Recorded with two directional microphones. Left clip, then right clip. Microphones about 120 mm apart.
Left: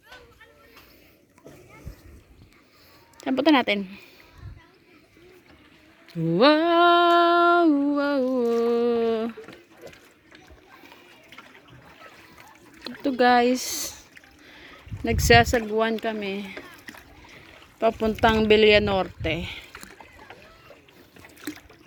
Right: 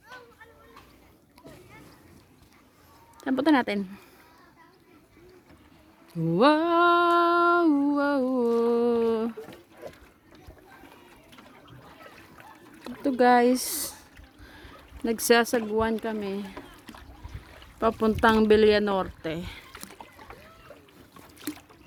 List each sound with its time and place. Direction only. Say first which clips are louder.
3.2 s speech: left 3 dB; centre (ahead or behind)
6.1 s a sound: left 3 dB; centre (ahead or behind)
9.8 s ratchet: right 2 dB; 15° left (ahead or behind)
12.8 s a sound: left 1 dB; centre (ahead or behind)
13.4 s speech: left 1 dB; 10° right (ahead or behind)
14.4 s a sound: left 1 dB; centre (ahead or behind)
15.7 s speech: left 3 dB; 5° left (ahead or behind)
16.9 s splash: left 4 dB; 90° left
17.8 s speech: left 3 dB; 15° right (ahead or behind)
18.4 s speech: left 3 dB; 5° right (ahead or behind)
19.7 s rowboat: left 1 dB; 45° left (ahead or behind)
21.3 s trickle: left 1 dB; 65° left (ahead or behind)